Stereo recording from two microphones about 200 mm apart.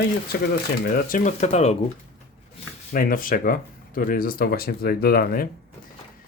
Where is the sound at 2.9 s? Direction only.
45° left (ahead or behind).